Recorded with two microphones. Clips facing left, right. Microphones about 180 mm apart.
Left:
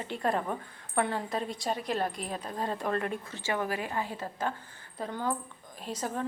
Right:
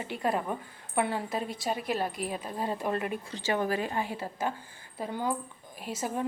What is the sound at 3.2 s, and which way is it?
Speech, 30° right (ahead or behind).